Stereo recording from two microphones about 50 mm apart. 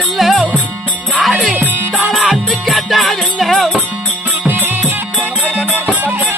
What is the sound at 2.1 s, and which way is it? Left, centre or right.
Music, centre.